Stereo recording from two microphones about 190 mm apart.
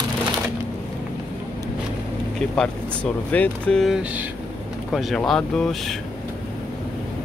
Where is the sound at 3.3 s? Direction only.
5° left (ahead or behind).